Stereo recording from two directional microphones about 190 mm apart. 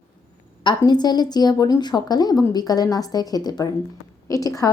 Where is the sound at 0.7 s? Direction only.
20° left (ahead or behind).